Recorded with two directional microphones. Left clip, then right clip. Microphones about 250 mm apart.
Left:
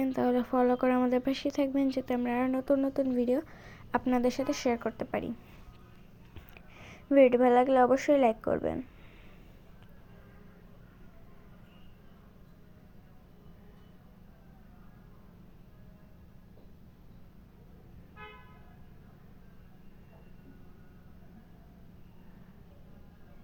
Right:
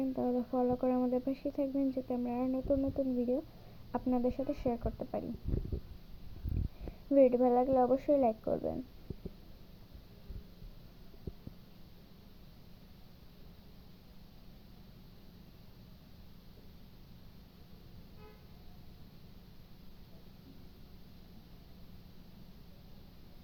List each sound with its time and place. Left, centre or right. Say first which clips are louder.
0.0 s speech: left 6 dB; left
7.1 s speech: left 5 dB; left